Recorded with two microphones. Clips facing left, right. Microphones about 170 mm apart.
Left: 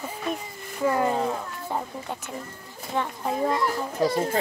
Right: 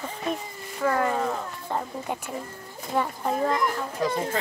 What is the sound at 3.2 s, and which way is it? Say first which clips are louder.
Speech: left 2 dB; 15° left (ahead or behind).